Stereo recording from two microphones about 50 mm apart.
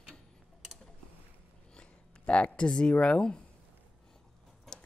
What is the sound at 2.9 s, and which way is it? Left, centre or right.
Speech, left.